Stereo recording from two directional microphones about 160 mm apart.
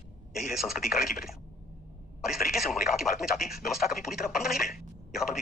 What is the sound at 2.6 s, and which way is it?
Speech, centre (ahead or behind).